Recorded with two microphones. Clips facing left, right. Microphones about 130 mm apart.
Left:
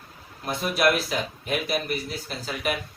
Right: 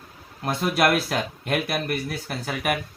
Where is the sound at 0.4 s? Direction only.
60° right (ahead or behind).